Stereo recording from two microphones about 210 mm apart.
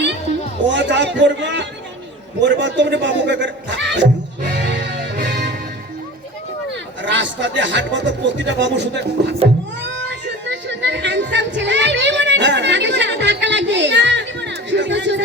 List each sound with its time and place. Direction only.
0.7 s speech: 60° right (ahead or behind)
4.5 s music: 60° right (ahead or behind)
7.0 s speech: 60° right (ahead or behind)